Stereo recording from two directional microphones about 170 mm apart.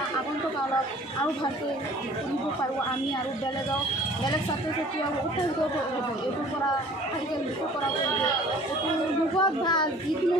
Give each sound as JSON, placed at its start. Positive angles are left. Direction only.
{"t": 9.4, "sound": "a child's voice", "side_deg": 25}